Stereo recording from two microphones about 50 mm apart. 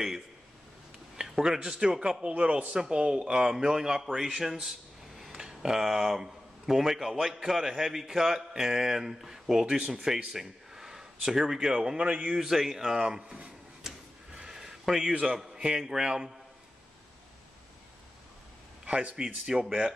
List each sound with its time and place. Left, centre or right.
1.1 s a man's voice: centre
2.3 s speech: right; by 4.3 s centre
4.6 s a sound: centre
5.5 s speech: centre
12.0 s a man's voice: right
12.4 s speech: centre
13.8 s a sound: centre
15.5 s speech: centre
18.9 s speech: right